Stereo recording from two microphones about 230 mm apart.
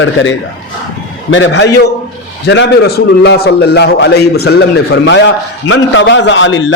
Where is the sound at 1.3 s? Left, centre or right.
Left.